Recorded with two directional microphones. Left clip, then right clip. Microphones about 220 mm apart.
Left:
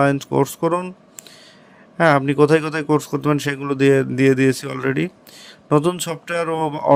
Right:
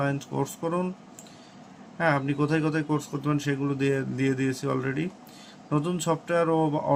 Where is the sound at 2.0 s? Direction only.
50° left (ahead or behind).